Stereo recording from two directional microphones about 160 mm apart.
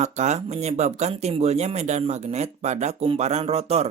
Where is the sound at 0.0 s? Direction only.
45° right (ahead or behind).